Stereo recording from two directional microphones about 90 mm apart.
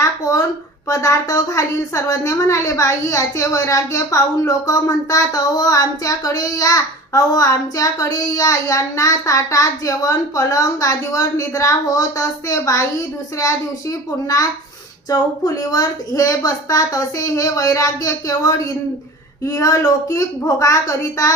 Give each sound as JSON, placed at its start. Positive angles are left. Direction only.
{"t": 0.0, "sound": "a sound", "side_deg": 40}
{"t": 0.9, "sound": "a woman's voice", "side_deg": 40}
{"t": 15.1, "sound": "a woman's voice", "side_deg": 45}